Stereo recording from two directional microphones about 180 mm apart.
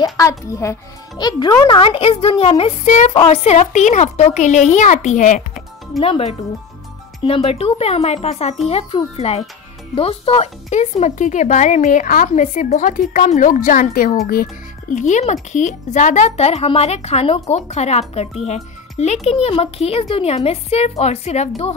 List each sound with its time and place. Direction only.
0.0 s a child's voice: 20° left (ahead or behind); by 21.7 s 35° left (ahead or behind)